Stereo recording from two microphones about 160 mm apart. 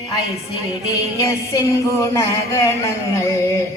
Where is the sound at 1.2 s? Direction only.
25° left (ahead or behind).